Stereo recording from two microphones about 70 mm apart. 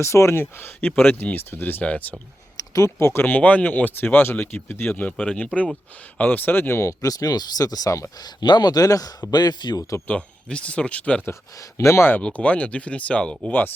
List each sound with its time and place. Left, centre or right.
0.0 s speech: left
2.6 s speech: left
5.1 s speech: centre; by 6.9 s left
7.0 s speech: left
8.2 s a man's voice: left
10.1 s speech: centre
11.5 s speech: left
12.2 s speech: centre